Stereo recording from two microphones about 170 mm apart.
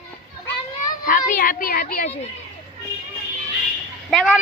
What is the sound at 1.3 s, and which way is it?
Speech, 55° left (ahead or behind).